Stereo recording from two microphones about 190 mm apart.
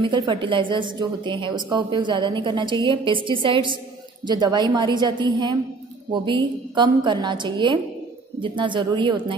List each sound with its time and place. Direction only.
0.0 s a woman's voice: 25° right (ahead or behind)